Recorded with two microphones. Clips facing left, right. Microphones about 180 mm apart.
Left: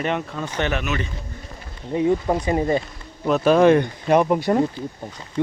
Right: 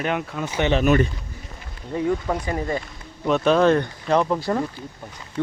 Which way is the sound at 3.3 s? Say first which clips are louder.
Left 2 dB; 5° left (ahead or behind).